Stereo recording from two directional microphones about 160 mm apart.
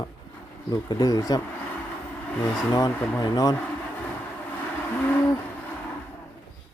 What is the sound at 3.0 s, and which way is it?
Speech, 10° left (ahead or behind).